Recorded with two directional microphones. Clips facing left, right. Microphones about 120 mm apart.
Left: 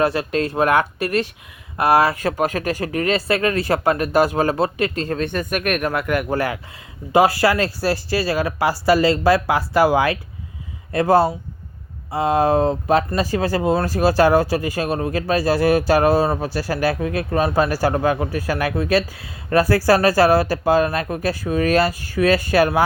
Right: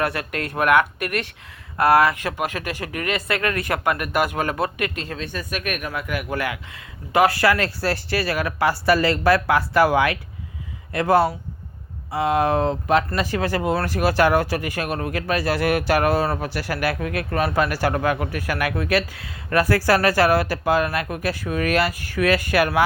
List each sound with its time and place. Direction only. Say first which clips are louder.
0.0 s speech: left 6 dB; 25° left (ahead or behind)
5.0 s speech: left 7 dB; 50° left (ahead or behind)
6.2 s speech: left 4 dB; 40° left (ahead or behind)
7.1 s speech: left 2 dB; 25° left (ahead or behind)